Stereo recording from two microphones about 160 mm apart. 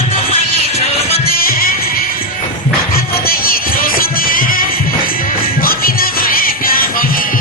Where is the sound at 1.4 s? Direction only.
65° left (ahead or behind).